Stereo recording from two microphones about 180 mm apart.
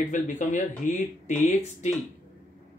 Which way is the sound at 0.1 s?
45° left (ahead or behind).